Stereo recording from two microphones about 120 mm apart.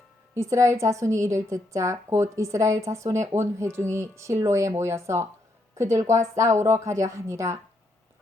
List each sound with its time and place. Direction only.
0.3 s a woman's voice: 25° right (ahead or behind)